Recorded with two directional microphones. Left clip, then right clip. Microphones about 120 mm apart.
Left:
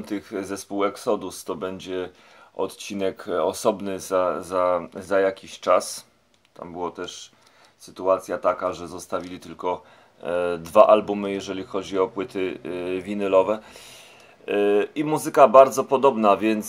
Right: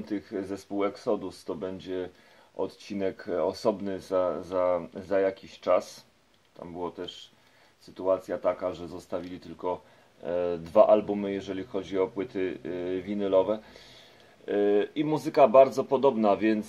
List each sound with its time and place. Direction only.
0.0 s speech: 25° left (ahead or behind)
5.1 s speech: 20° left (ahead or behind)
7.9 s speech: 15° left (ahead or behind)
14.5 s speech: 10° left (ahead or behind)